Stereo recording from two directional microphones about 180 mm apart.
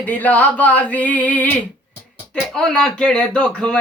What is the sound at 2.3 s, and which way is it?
Speech, 5° left (ahead or behind).